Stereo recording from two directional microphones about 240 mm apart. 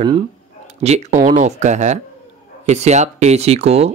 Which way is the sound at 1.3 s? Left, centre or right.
Right.